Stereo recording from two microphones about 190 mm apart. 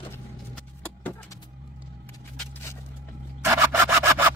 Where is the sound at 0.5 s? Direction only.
5° left (ahead or behind).